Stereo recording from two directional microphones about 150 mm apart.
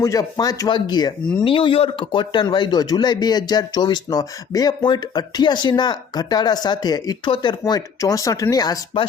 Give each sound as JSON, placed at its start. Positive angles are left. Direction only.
{"t": 0.0, "sound": "speech", "side_deg": 25}